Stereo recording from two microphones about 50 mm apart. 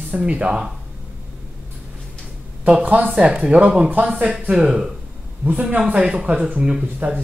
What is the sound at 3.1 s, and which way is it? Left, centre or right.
Speech, centre.